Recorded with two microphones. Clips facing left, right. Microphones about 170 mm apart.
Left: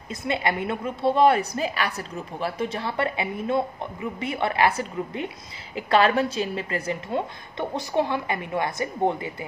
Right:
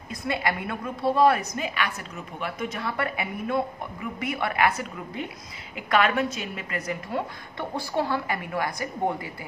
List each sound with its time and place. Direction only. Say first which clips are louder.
0.1 s a woman's voice: left 2 dB; 25° left (ahead or behind)